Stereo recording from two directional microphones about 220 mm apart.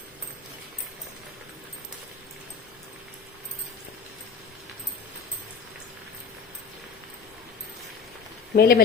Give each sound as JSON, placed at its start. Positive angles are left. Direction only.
{"t": 8.5, "sound": "speech", "side_deg": 40}